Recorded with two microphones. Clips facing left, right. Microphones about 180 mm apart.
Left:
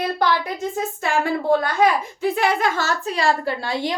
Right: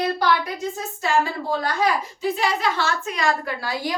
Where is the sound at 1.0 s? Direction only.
55° left (ahead or behind).